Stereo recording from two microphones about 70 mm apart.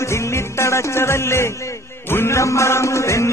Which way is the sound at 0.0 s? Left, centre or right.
Left.